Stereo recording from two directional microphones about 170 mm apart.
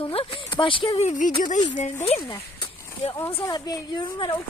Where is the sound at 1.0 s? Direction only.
50° left (ahead or behind).